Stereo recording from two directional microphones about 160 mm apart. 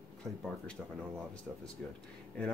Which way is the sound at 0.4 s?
5° left (ahead or behind).